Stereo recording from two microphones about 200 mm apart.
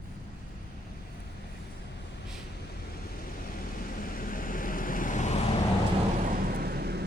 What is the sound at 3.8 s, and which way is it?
Vehicle, 45° left (ahead or behind).